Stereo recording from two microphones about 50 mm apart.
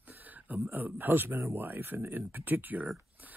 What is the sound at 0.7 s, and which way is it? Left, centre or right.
Speech, right.